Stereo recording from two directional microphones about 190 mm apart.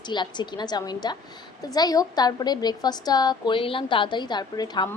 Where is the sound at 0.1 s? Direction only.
25° left (ahead or behind).